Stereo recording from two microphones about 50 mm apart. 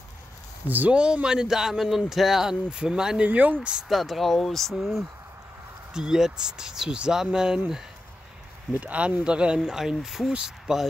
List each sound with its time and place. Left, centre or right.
0.7 s speech: right
0.9 s speech: centre
3.3 s speech: right
3.9 s speech: centre
8.7 s speech: right; by 10.8 s centre